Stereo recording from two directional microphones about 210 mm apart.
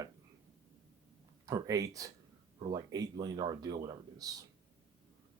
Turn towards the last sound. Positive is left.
turn(degrees=-15)  # may be behind; listen again after turning